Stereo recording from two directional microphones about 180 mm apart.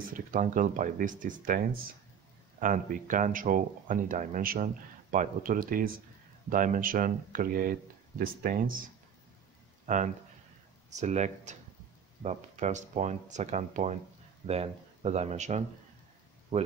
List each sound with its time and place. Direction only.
0.3 s speech: 50° right (ahead or behind)
2.6 s speech: 45° right (ahead or behind)